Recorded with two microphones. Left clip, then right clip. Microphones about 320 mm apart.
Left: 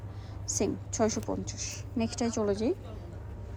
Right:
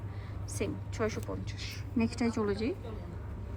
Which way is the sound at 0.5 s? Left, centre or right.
Left.